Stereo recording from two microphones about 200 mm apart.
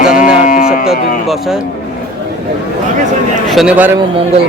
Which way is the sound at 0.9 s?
Centre (ahead or behind).